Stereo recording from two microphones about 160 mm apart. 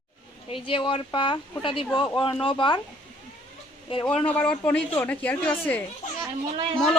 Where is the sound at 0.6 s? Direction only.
35° left (ahead or behind).